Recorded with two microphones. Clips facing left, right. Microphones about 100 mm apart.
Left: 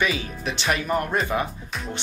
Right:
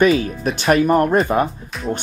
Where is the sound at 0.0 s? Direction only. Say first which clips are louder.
Right 10 dB; 45° right (ahead or behind).